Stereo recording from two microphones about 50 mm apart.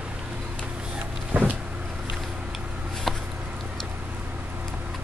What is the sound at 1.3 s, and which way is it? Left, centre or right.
Vehicle, right.